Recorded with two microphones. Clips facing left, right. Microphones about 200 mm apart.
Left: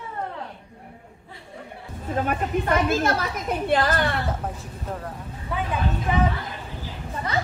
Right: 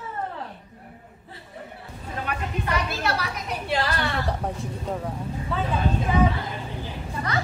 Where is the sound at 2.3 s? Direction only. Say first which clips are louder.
Left 4 dB; 50° left (ahead or behind).